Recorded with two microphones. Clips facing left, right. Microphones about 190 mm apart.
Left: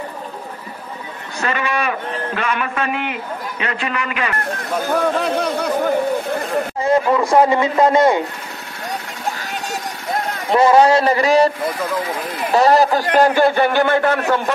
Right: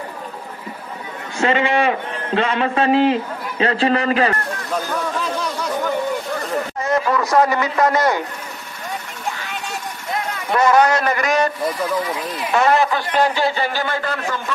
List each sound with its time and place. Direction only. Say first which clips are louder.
1.4 s a man's voice: right 4 dB; 25° right (ahead or behind)
4.8 s speech: left 5 dB; 55° left (ahead or behind)
6.8 s speech: left 4 dB; 25° left (ahead or behind)
10.5 s a man's voice: left 3 dB; 25° left (ahead or behind); by 14.5 s 60° left (ahead or behind)